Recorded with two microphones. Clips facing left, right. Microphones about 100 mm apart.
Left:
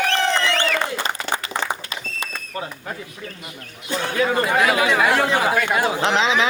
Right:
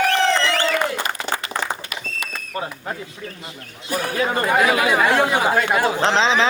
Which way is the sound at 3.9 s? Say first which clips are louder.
Right 1 dB; 25° left (ahead or behind).